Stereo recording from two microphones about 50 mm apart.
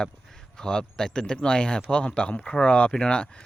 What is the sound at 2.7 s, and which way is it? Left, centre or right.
Speech, left.